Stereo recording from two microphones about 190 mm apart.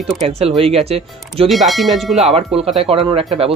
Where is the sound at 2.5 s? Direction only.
30° right (ahead or behind).